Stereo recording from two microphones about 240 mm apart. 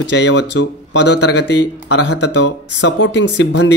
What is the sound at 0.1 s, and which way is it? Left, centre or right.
Speech, left.